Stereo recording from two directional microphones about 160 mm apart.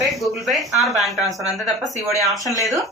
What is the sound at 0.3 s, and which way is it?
Speech, centre (ahead or behind).